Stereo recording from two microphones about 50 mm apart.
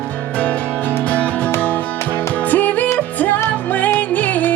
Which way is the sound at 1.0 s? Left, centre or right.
Left.